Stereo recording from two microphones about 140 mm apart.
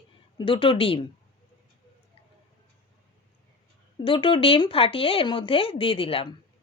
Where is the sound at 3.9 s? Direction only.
40° left (ahead or behind).